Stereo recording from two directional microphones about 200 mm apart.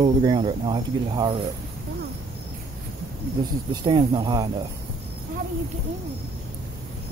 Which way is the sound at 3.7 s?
20° right (ahead or behind).